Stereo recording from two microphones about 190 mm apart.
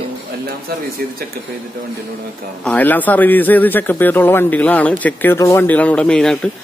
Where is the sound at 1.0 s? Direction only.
50° right (ahead or behind).